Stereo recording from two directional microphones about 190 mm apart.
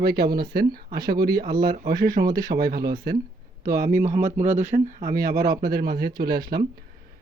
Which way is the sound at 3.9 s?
40° right (ahead or behind).